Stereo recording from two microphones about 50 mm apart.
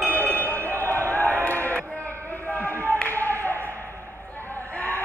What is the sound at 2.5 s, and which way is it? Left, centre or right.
Clapping, left.